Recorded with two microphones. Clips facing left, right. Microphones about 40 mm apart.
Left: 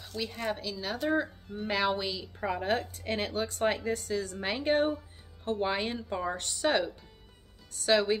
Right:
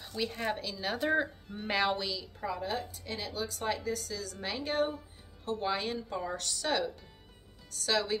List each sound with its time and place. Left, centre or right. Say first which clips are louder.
0.2 s speech: even; centre
2.0 s speech: left 2 dB; centre
2.4 s speech: left 5 dB; left